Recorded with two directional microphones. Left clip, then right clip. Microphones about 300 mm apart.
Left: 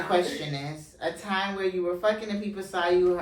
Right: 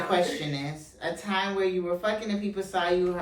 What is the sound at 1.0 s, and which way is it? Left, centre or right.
A woman's voice, centre.